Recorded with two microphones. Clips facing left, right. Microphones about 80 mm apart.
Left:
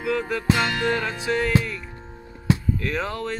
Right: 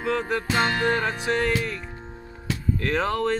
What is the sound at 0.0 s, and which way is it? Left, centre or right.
Music, right.